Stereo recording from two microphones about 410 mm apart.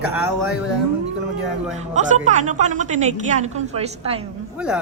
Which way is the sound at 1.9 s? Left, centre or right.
Centre.